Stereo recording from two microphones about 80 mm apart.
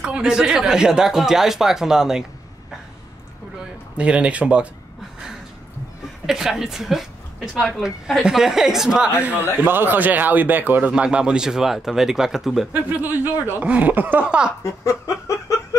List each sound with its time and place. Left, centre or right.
0.0 s speech: centre
3.9 s speech: centre
6.2 s a woman's voice: centre
9.2 s speech: right; by 12.6 s centre
13.0 s speech: right
14.6 s laughter: left